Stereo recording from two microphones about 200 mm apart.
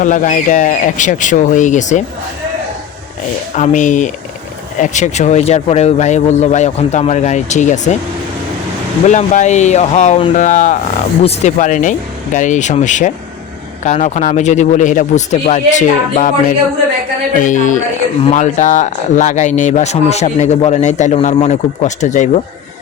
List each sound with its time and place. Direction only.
0.0 s speech: 40° left (ahead or behind)
3.5 s speech: 40° left (ahead or behind)
9.0 s speech: 35° left (ahead or behind)
17.4 s speech: 40° left (ahead or behind)